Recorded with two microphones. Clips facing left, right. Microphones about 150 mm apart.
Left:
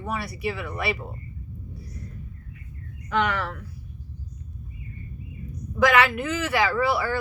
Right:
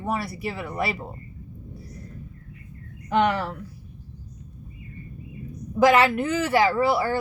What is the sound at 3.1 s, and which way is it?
Speech, 30° right (ahead or behind).